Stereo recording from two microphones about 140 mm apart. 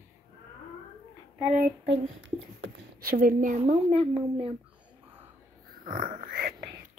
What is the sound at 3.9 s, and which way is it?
Speech, 45° right (ahead or behind).